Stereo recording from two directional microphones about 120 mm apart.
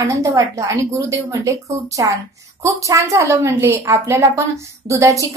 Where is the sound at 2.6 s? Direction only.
25° right (ahead or behind).